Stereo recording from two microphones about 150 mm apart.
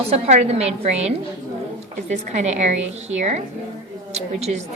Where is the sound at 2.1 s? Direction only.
50° right (ahead or behind).